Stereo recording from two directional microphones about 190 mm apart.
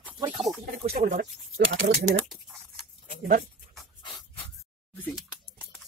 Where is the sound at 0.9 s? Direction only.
50° right (ahead or behind).